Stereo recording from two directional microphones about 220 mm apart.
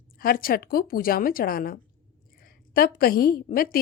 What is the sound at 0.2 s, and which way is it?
A woman's voice, 40° left (ahead or behind).